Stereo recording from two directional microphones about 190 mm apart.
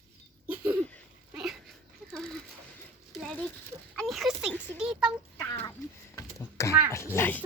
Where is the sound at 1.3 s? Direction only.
Centre (ahead or behind).